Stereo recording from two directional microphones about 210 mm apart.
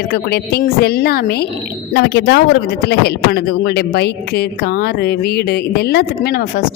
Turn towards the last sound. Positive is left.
turn(degrees=45)  # may be behind; listen again after turning